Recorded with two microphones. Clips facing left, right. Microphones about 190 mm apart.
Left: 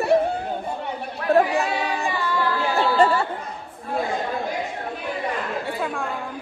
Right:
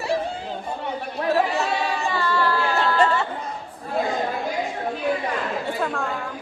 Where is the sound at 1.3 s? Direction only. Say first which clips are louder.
Left 4 dB; 55° left (ahead or behind).